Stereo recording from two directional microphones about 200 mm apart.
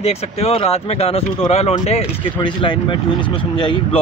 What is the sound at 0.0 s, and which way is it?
Speech, 30° left (ahead or behind).